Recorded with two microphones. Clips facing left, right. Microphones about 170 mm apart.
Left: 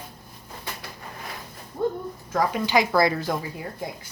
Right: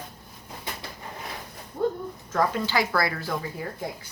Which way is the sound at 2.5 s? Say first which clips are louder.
Left 4 dB; 15° left (ahead or behind).